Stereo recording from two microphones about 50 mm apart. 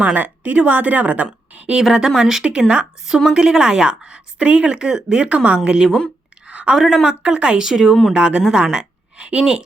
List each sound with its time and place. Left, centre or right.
0.0 s a woman's voice: right
1.8 s speech: centre
6.5 s a sound: right
6.7 s speech: centre
7.1 s a woman's voice: right
9.1 s a woman's voice: right